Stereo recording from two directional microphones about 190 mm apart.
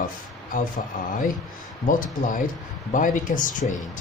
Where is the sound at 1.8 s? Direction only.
45° left (ahead or behind).